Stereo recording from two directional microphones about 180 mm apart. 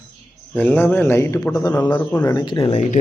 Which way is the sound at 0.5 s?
10° left (ahead or behind).